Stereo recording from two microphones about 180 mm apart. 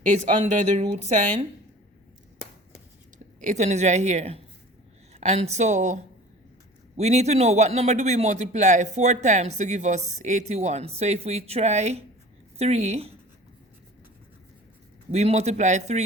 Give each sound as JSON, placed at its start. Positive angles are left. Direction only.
{"t": 0.0, "sound": "speech", "side_deg": -45}
{"t": 3.4, "sound": "a man's voice", "side_deg": -40}
{"t": 15.1, "sound": "a man's voice", "side_deg": -40}